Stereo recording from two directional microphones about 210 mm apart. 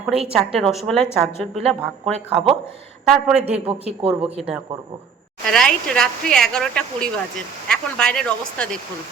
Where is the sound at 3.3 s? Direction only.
30° right (ahead or behind).